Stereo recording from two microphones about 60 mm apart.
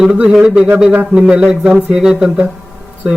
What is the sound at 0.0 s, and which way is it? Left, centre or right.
Speech, centre.